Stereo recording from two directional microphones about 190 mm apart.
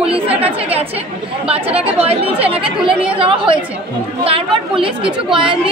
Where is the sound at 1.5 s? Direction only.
30° right (ahead or behind).